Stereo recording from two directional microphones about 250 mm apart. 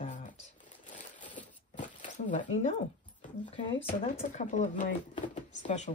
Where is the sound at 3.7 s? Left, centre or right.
Left.